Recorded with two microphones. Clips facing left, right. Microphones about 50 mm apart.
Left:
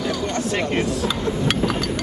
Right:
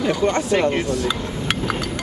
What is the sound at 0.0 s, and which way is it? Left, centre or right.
Speech, right.